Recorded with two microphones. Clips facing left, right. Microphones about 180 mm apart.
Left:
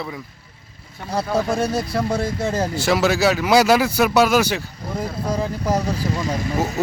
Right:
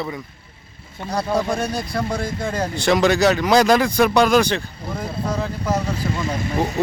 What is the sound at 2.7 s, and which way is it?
Speech, 5° left (ahead or behind).